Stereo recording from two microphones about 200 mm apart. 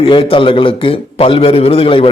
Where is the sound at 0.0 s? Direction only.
25° left (ahead or behind).